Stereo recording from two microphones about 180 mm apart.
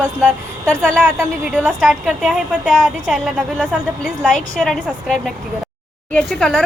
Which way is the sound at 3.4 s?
5° right (ahead or behind).